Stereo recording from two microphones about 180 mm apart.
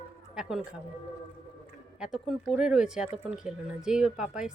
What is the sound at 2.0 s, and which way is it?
A woman's voice, 5° right (ahead or behind).